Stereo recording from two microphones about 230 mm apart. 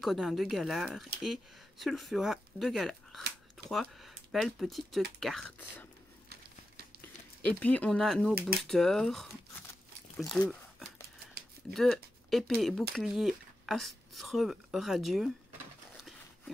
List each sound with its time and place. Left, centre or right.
0.0 s a woman's voice: centre
7.6 s speech: centre
10.1 s a sound: centre
11.7 s speech: centre
16.0 s dog: centre